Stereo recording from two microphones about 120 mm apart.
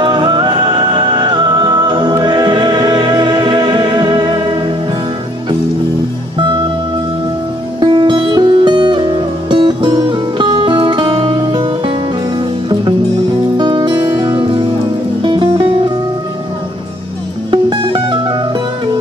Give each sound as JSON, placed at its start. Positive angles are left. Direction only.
{"t": 0.0, "sound": "music", "side_deg": -40}
{"t": 7.8, "sound": "music", "side_deg": -40}
{"t": 13.6, "sound": "music", "side_deg": -40}
{"t": 17.5, "sound": "music", "side_deg": -40}